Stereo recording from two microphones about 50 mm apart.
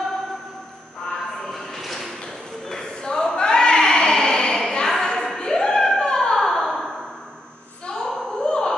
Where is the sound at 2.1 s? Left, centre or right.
Centre.